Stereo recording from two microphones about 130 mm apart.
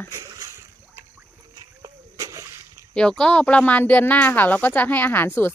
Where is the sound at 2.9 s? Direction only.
5° left (ahead or behind).